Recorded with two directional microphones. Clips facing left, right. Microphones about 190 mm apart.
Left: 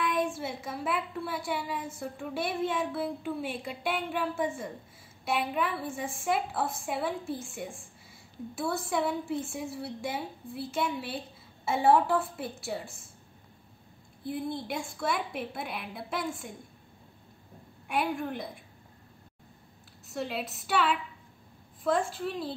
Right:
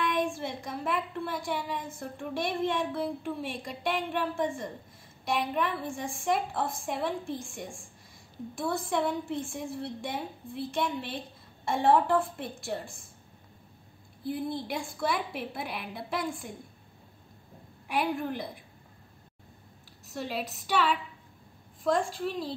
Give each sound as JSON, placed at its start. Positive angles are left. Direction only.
{"t": 0.0, "sound": "a woman's voice", "side_deg": 5}
{"t": 14.2, "sound": "a woman's voice", "side_deg": 0}
{"t": 17.8, "sound": "a woman's voice", "side_deg": 0}
{"t": 20.1, "sound": "a woman's voice", "side_deg": 0}